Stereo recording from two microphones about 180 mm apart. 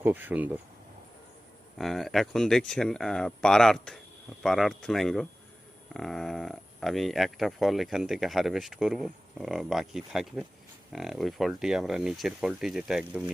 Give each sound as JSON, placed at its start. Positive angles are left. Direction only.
{"t": 0.0, "sound": "speech", "side_deg": -10}
{"t": 1.8, "sound": "speech", "side_deg": 0}